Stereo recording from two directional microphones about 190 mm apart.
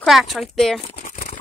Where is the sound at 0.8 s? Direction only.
40° left (ahead or behind).